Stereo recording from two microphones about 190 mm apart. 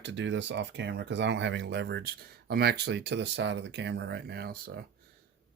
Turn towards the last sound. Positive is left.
turn(degrees=-55)  # may be behind; listen again after turning